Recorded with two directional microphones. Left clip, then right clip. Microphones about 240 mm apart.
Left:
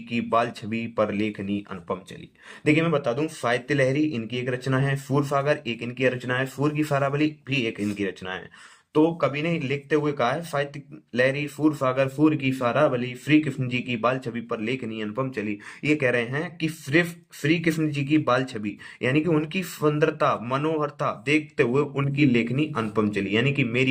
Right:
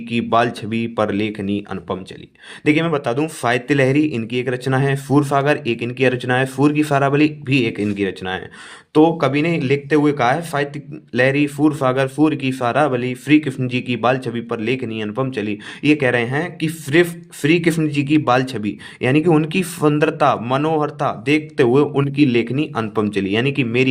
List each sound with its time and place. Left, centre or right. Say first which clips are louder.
0.1 s speech: right 7 dB; right